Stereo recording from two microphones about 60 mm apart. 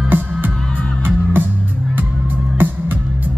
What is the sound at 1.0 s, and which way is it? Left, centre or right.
Music, right.